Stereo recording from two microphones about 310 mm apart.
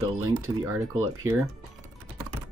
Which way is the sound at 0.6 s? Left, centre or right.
Centre.